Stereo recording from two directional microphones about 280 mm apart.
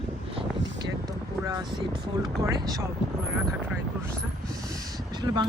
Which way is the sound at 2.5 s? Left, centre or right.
Centre.